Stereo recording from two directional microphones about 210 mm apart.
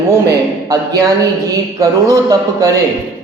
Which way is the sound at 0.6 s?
15° right (ahead or behind).